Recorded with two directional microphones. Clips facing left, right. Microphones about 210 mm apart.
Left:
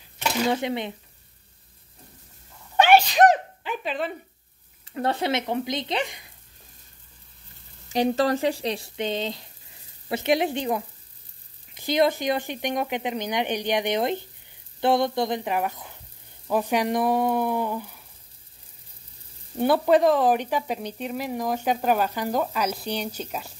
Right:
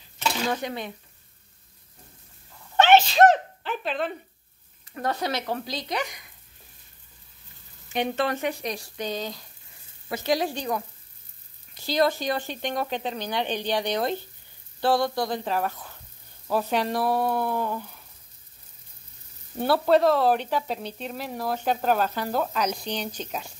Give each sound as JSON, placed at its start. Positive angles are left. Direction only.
{"t": 0.5, "sound": "speech", "side_deg": 25}
{"t": 2.8, "sound": "sneeze", "side_deg": 15}
{"t": 4.8, "sound": "speech", "side_deg": 25}
{"t": 7.9, "sound": "speech", "side_deg": 35}
{"t": 16.4, "sound": "a sound", "side_deg": 15}
{"t": 19.6, "sound": "speech", "side_deg": 15}